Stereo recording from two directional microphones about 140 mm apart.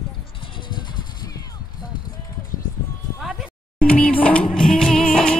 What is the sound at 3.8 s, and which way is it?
Music, 10° left (ahead or behind).